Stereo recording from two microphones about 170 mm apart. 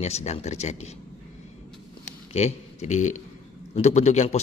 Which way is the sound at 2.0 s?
40° left (ahead or behind).